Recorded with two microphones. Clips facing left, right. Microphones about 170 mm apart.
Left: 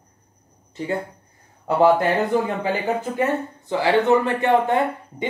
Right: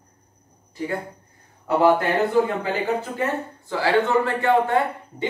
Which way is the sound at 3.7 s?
20° left (ahead or behind).